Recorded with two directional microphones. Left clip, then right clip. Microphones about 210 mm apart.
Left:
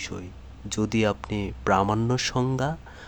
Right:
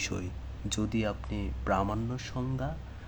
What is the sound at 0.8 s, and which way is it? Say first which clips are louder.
Speech: left 9 dB; 25° left (ahead or behind).